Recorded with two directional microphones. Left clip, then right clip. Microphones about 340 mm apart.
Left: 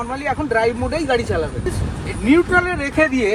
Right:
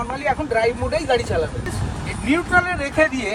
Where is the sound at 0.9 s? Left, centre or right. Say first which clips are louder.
Left 1 dB; centre.